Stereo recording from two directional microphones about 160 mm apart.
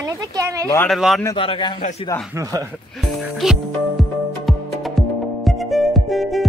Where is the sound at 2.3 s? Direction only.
20° right (ahead or behind).